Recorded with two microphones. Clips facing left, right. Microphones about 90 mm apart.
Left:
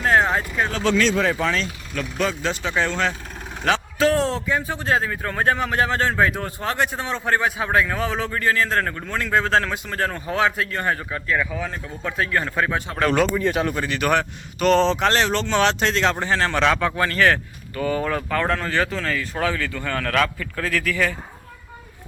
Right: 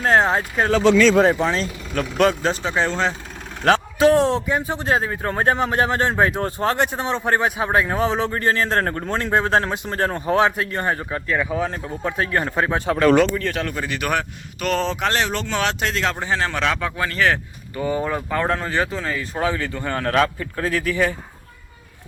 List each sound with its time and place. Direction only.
0.0 s speech: 35° right (ahead or behind)
2.0 s a man's voice: 55° right (ahead or behind)
2.4 s a man's voice: 35° right (ahead or behind)
13.4 s speech: 10° left (ahead or behind)
13.7 s a man's voice: 5° right (ahead or behind)
17.7 s a man's voice: 20° right (ahead or behind)